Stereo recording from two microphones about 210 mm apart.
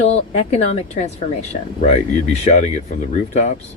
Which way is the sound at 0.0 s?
30° left (ahead or behind).